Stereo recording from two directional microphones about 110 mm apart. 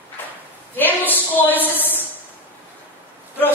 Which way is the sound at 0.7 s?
15° left (ahead or behind).